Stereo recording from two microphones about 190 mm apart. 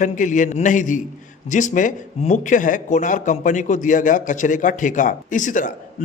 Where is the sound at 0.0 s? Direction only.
40° left (ahead or behind).